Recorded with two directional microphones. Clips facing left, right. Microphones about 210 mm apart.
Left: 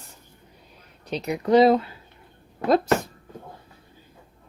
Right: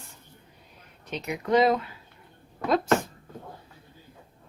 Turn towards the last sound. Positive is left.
turn(degrees=35)  # may be behind; listen again after turning